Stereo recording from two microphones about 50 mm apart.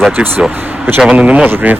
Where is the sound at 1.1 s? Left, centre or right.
Right.